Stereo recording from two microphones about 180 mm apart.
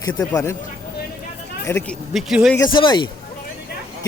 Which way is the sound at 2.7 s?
25° left (ahead or behind).